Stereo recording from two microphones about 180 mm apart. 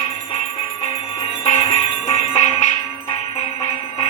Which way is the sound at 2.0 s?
40° left (ahead or behind).